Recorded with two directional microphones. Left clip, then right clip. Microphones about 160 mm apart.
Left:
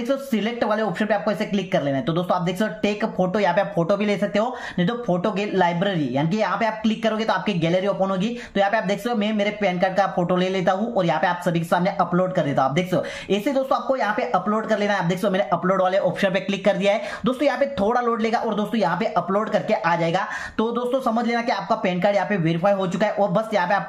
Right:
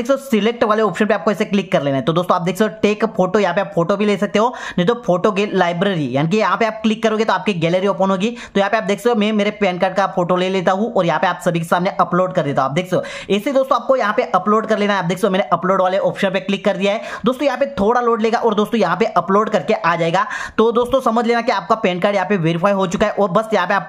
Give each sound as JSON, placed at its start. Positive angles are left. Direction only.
{"t": 0.1, "sound": "speech", "side_deg": -50}
{"t": 18.5, "sound": "speech", "side_deg": -50}